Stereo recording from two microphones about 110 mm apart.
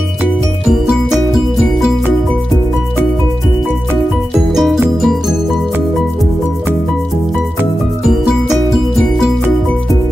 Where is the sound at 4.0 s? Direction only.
Centre (ahead or behind).